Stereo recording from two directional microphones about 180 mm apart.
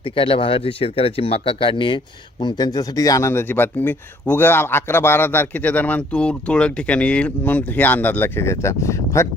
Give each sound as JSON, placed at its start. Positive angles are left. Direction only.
{"t": 0.0, "sound": "speech", "side_deg": 30}